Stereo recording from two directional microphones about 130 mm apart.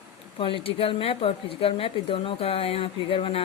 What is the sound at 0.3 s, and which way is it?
Speech, 45° left (ahead or behind).